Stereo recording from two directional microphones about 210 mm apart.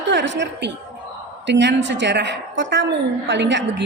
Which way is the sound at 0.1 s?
55° right (ahead or behind).